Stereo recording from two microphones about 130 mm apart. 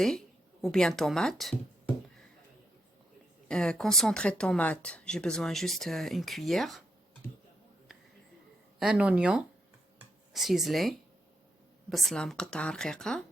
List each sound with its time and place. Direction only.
0.6 s speech: 5° left (ahead or behind)
3.5 s speech: 5° left (ahead or behind)
8.8 s speech: 5° right (ahead or behind)